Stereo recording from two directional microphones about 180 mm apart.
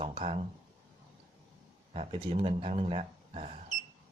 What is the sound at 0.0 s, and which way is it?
Speech, 30° right (ahead or behind).